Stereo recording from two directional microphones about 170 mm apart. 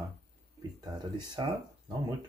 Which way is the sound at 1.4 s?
25° right (ahead or behind).